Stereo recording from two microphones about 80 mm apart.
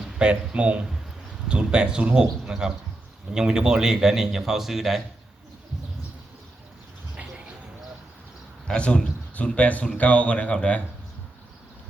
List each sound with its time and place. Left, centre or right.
0.0 s a man's voice: centre
8.6 s speech: centre
9.6 s a man's voice: centre